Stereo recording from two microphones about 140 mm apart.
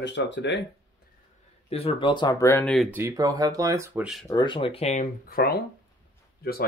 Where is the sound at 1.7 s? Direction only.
40° left (ahead or behind).